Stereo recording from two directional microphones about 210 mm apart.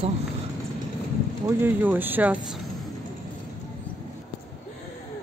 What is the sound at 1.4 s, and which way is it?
Speech, 10° right (ahead or behind).